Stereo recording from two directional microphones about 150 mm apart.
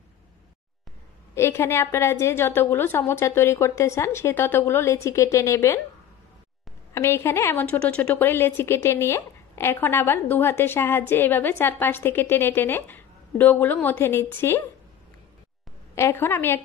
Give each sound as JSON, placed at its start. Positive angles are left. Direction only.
{"t": 1.3, "sound": "a woman's voice", "side_deg": 20}
{"t": 6.9, "sound": "a woman's voice", "side_deg": 15}
{"t": 15.9, "sound": "a woman's voice", "side_deg": 15}